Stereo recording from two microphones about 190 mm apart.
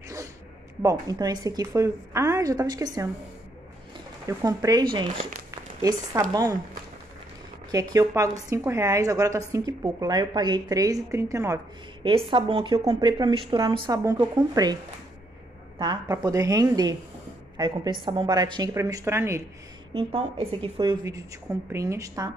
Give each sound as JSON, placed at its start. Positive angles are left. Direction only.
{"t": 0.8, "sound": "a woman's voice", "side_deg": -20}
{"t": 4.3, "sound": "a woman's voice", "side_deg": -15}
{"t": 5.5, "sound": "a sound", "side_deg": -20}
{"t": 7.7, "sound": "a woman's voice", "side_deg": -20}
{"t": 15.8, "sound": "a woman's voice", "side_deg": -20}
{"t": 19.9, "sound": "a woman's voice", "side_deg": -30}